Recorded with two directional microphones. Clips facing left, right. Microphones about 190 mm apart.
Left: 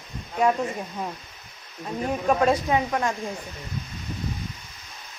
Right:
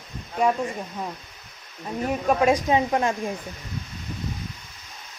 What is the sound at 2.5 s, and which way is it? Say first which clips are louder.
Speech: right 2 dB; 20° right (ahead or behind).